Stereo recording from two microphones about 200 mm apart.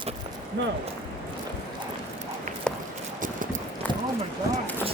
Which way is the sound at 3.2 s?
40° right (ahead or behind).